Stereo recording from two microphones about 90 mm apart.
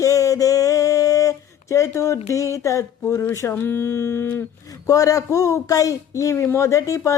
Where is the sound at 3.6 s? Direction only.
25° left (ahead or behind).